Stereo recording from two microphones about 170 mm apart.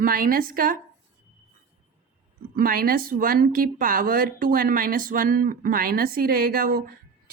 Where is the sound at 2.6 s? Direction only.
60° right (ahead or behind).